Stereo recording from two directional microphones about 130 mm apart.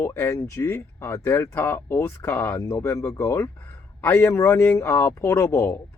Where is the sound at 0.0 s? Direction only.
20° left (ahead or behind).